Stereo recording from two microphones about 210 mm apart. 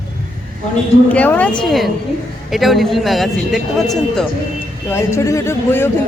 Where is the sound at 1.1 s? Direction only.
5° left (ahead or behind).